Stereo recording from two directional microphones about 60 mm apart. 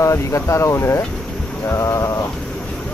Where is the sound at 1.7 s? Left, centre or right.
Left.